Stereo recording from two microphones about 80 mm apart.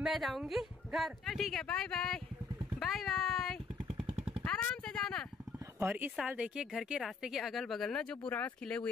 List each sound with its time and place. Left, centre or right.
0.0 s speech: centre
5.8 s speech: right; by 8.9 s centre